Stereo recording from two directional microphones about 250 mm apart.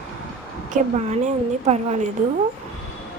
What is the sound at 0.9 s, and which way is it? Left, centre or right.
A woman's voice, right.